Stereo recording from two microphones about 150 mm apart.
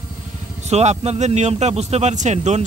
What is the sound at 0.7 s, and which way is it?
A man's voice, 45° right (ahead or behind).